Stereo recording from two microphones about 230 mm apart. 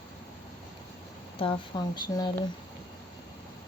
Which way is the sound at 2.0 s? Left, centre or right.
Centre.